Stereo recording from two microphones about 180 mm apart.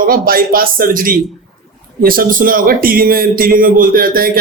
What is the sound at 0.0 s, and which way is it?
Speech, 55° right (ahead or behind).